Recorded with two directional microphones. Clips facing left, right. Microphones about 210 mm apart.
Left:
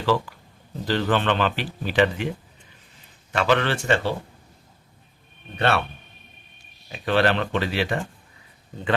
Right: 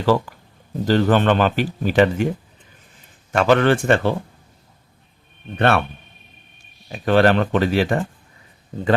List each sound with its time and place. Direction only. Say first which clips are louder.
0.0 s speech: right 5 dB; 45° right (ahead or behind)
3.3 s speech: right 6 dB; 45° right (ahead or behind)
5.5 s speech: right 5 dB; 50° right (ahead or behind)
6.9 s speech: right 6 dB; 45° right (ahead or behind)